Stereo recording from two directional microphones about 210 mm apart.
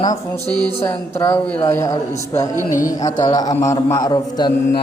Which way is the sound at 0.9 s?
15° left (ahead or behind).